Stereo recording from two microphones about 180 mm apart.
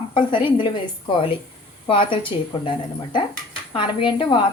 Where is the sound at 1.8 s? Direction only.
30° left (ahead or behind).